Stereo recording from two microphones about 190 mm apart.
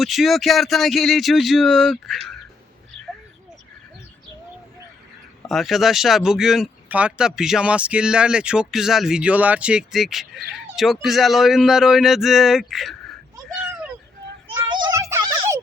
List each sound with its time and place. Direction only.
0.0 s speech: centre (ahead or behind)
5.5 s speech: centre (ahead or behind)
14.4 s children playing: 25° right (ahead or behind)